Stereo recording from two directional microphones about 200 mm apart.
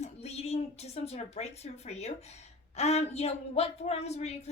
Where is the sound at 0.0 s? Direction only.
30° left (ahead or behind).